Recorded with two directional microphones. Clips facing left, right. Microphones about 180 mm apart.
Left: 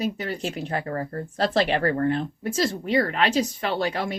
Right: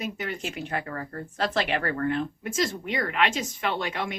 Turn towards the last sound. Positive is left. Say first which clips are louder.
# left 4 dB
turn(degrees=35)  # may be behind; listen again after turning